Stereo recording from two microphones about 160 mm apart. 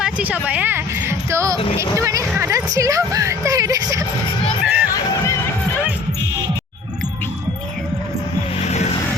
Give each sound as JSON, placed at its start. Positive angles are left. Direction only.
{"t": 0.0, "sound": "speech", "side_deg": -10}
{"t": 1.5, "sound": "speech", "side_deg": 35}
{"t": 2.0, "sound": "speech", "side_deg": -20}
{"t": 2.3, "sound": "a sound", "side_deg": -15}
{"t": 4.6, "sound": "music", "side_deg": -5}
{"t": 8.5, "sound": "music", "side_deg": 45}